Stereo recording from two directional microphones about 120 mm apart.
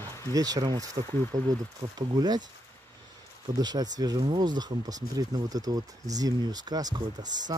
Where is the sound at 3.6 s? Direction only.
35° right (ahead or behind).